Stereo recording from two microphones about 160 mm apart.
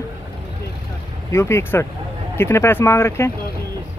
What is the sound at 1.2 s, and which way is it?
Speech, 15° left (ahead or behind).